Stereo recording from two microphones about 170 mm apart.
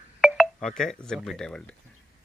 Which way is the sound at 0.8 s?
5° left (ahead or behind).